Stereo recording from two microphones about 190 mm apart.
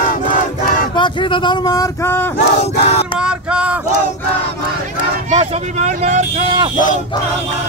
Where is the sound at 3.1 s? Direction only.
5° right (ahead or behind).